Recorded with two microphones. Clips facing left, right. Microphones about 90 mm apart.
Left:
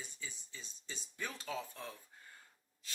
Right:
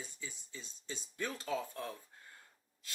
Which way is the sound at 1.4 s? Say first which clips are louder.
Right 5 dB; 15° right (ahead or behind).